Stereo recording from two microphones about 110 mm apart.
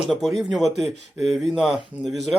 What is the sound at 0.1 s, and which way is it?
Speech, centre (ahead or behind).